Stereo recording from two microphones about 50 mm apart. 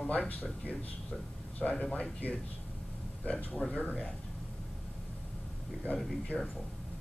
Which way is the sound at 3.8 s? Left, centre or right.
Left.